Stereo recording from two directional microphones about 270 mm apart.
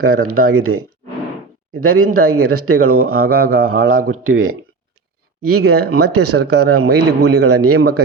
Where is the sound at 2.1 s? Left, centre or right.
Right.